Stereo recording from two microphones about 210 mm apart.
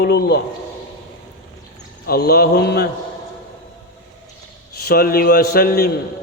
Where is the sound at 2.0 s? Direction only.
45° left (ahead or behind).